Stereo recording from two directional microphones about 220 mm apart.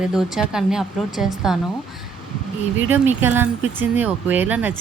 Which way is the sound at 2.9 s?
10° right (ahead or behind).